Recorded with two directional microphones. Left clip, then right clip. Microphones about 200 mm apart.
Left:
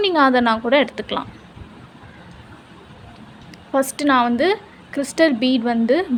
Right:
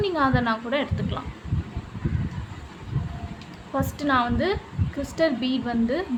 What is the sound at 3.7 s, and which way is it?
A woman's voice, 40° left (ahead or behind).